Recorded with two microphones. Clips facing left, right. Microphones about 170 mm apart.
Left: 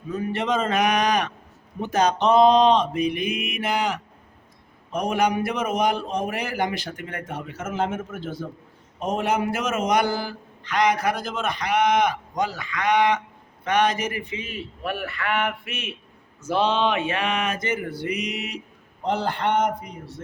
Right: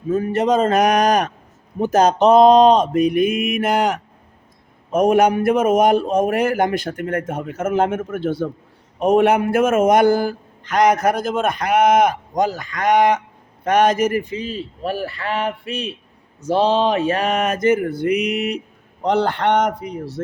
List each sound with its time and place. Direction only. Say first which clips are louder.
0.1 s a man's voice: right 7 dB; 45° right (ahead or behind); by 20.2 s 75° right (ahead or behind)